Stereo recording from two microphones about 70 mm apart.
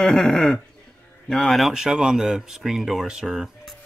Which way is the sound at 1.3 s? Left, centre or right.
Centre.